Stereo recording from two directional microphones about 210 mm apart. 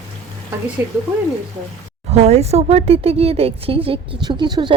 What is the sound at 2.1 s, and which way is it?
Speech, 30° right (ahead or behind).